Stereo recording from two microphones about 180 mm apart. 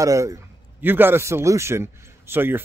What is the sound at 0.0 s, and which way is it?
A man's voice, 20° right (ahead or behind).